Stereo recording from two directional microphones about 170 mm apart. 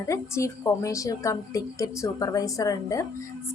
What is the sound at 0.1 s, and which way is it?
A woman's voice, 15° left (ahead or behind).